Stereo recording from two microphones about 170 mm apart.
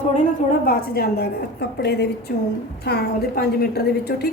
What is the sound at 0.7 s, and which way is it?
A woman's voice, 60° left (ahead or behind).